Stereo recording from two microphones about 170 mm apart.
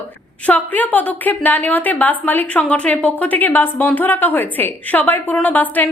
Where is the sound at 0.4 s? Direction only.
10° left (ahead or behind).